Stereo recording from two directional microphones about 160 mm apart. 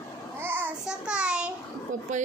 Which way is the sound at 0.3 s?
15° right (ahead or behind).